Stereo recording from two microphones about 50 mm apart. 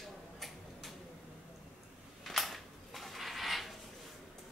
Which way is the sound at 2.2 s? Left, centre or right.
Centre.